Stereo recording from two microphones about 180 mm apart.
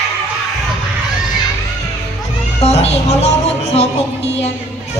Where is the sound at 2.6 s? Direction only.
35° left (ahead or behind).